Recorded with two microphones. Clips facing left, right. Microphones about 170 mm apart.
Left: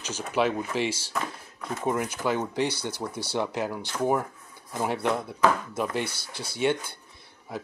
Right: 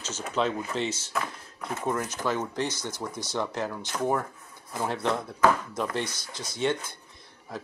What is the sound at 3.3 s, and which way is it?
Speech, 10° left (ahead or behind).